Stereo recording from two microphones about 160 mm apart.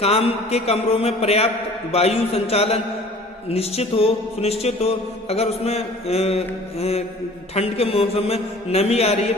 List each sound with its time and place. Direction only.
0.0 s music: 40° left (ahead or behind)